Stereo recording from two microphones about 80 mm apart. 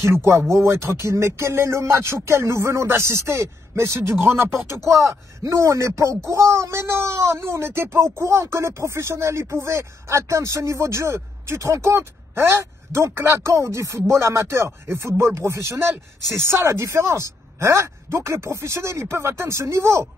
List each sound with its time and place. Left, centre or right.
0.1 s speech: right